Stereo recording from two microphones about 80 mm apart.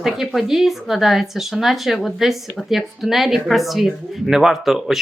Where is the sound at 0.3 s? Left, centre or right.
Centre.